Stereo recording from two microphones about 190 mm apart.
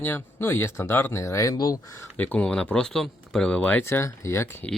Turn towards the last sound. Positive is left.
turn(degrees=15)  # may be behind; listen again after turning